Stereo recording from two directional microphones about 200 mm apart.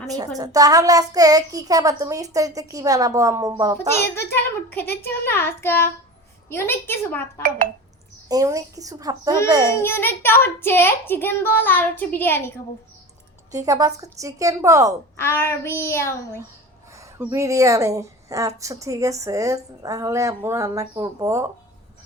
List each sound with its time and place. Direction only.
0.3 s speech: 20° right (ahead or behind)
3.8 s a child's voice: 10° left (ahead or behind)
8.3 s speech: 15° right (ahead or behind)
9.7 s a child's voice: 10° left (ahead or behind)
13.5 s speech: 15° right (ahead or behind)
15.1 s a child's voice: 10° left (ahead or behind)
16.9 s speech: 15° right (ahead or behind)